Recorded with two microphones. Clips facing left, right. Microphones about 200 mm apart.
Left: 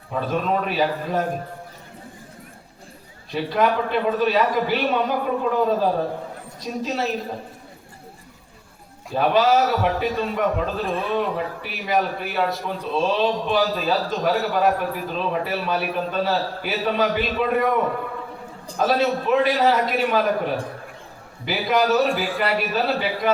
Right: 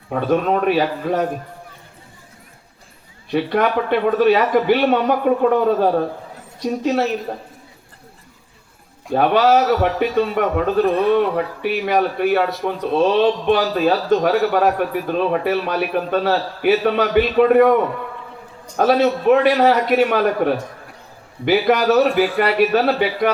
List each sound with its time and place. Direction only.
0.1 s a man's voice: 60° right (ahead or behind)
3.3 s a man's voice: 60° right (ahead or behind)
9.1 s a man's voice: 60° right (ahead or behind)
18.8 s a man's voice: 60° right (ahead or behind)